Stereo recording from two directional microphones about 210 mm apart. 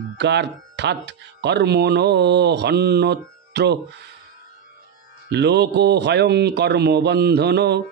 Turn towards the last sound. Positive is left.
turn(degrees=-50)  # may be behind; listen again after turning